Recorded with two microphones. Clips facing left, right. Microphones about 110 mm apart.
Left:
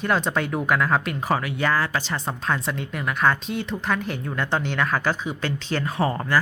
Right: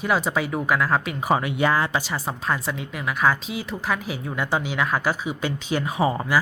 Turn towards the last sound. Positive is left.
turn(degrees=-10)  # may be behind; listen again after turning